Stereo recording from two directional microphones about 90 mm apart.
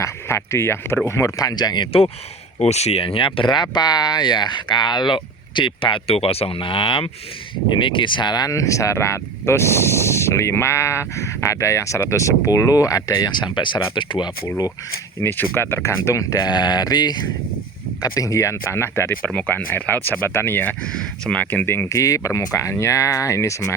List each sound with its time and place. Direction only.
0.0 s speech: 30° left (ahead or behind)
1.4 s speech: 45° left (ahead or behind); by 7.1 s 90° left
7.8 s speech: 65° left (ahead or behind)
15.2 s speech: 25° left (ahead or behind)
16.4 s speech: 50° left (ahead or behind)
18.0 s speech: 40° left (ahead or behind); by 20.7 s 25° left (ahead or behind)
20.9 s speech: 10° left (ahead or behind)
21.8 s speech: 40° left (ahead or behind)